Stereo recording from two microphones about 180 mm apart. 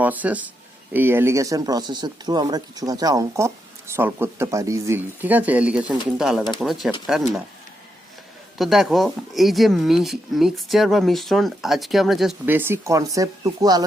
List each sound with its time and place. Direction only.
0.0 s speech: 10° right (ahead or behind)
8.5 s speech: centre (ahead or behind); by 13.8 s 20° right (ahead or behind)